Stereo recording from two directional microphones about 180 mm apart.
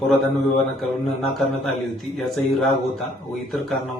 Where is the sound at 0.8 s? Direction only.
Centre (ahead or behind).